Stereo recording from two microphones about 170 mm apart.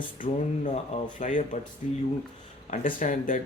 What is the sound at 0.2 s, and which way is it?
Speech, 45° left (ahead or behind).